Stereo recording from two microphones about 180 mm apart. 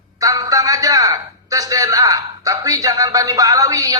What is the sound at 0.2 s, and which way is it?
A woman's voice, 20° right (ahead or behind).